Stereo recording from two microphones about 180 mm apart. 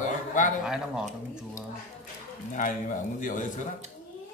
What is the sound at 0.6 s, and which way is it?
Speech, 5° right (ahead or behind).